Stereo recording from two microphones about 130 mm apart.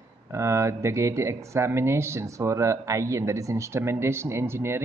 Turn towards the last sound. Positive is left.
turn(degrees=-20)  # may be behind; listen again after turning